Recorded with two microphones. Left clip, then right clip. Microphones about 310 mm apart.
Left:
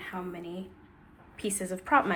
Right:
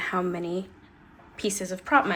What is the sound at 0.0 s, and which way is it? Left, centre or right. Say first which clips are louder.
A woman's voice: right 10 dB; centre.